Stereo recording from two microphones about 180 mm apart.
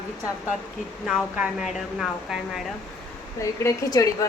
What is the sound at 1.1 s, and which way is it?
Speech, centre (ahead or behind).